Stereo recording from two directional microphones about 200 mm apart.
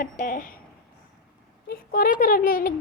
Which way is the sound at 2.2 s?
45° left (ahead or behind).